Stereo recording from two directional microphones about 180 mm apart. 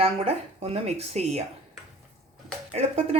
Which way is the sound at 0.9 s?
35° right (ahead or behind).